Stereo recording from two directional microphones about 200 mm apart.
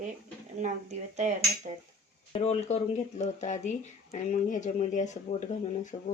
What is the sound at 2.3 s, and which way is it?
Speech, 30° left (ahead or behind).